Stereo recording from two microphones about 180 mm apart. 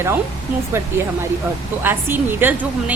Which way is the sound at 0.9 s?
15° right (ahead or behind).